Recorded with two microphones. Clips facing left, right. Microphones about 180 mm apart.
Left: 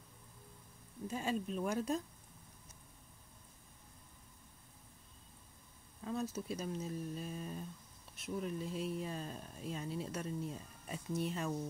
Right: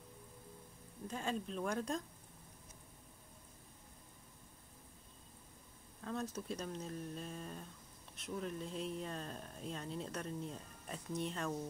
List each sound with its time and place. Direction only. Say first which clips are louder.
1.0 s speech: left 3 dB; 10° left (ahead or behind)
6.3 s speech: left 2 dB; 5° left (ahead or behind)